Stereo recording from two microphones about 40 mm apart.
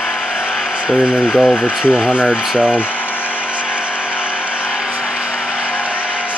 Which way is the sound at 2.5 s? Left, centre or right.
Right.